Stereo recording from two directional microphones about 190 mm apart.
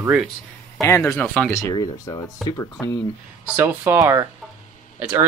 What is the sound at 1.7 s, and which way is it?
Speech, 20° left (ahead or behind).